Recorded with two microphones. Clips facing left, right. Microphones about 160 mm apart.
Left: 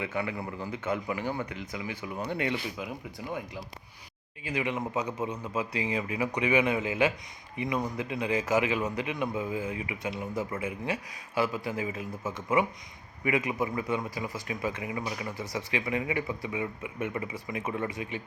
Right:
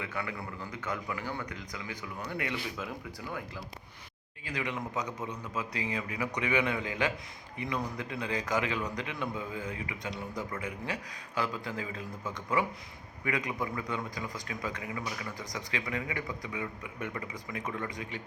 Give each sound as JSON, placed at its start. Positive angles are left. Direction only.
{"t": 0.0, "sound": "a man's voice", "side_deg": 20}
{"t": 13.2, "sound": "a man's voice", "side_deg": 20}